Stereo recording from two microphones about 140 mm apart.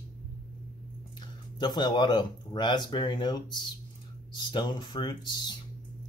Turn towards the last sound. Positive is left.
turn(degrees=30)  # may be behind; listen again after turning